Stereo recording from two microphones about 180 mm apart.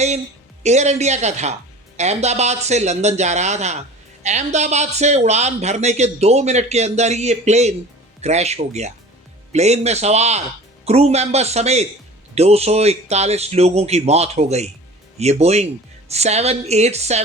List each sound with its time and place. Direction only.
0.6 s speech: 40° right (ahead or behind)